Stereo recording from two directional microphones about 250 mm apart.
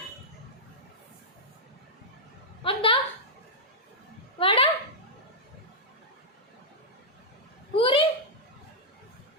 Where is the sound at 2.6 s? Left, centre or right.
Left.